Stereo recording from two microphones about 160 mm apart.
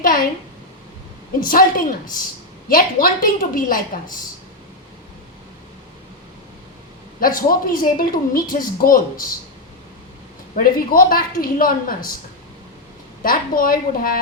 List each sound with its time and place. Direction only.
0.0 s a sound: 60° left (ahead or behind)
1.4 s speech: 65° left (ahead or behind)
2.6 s speech: 65° left (ahead or behind)
7.2 s speech: 60° left (ahead or behind)
10.5 s speech: 60° left (ahead or behind)
13.2 s speech: 65° left (ahead or behind)